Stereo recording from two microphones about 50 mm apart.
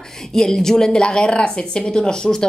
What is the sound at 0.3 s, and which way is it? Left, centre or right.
Speech, centre.